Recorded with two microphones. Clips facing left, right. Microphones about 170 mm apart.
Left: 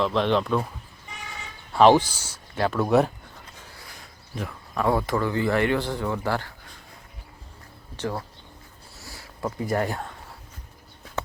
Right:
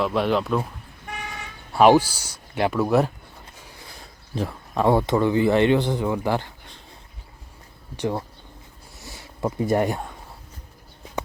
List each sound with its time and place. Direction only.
0.0 s speech: 5° right (ahead or behind)
1.0 s vehicle: 65° right (ahead or behind)
1.7 s speech: 10° right (ahead or behind)
3.9 s speech: 30° right (ahead or behind)
7.9 s speech: 15° right (ahead or behind)
9.0 s a sound: 20° right (ahead or behind)